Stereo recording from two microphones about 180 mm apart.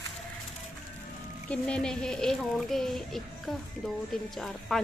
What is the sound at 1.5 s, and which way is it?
Speech, 5° left (ahead or behind).